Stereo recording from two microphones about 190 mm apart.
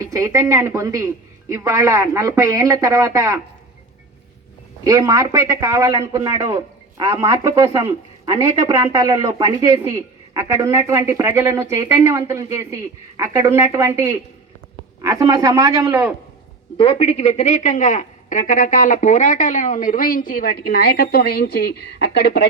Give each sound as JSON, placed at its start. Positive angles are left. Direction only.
{"t": 0.0, "sound": "a man's voice", "side_deg": -15}
{"t": 4.8, "sound": "a man's voice", "side_deg": -20}
{"t": 16.7, "sound": "a woman's voice", "side_deg": 30}